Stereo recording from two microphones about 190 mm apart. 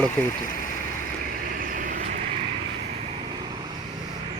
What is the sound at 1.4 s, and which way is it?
Vehicle, 45° right (ahead or behind).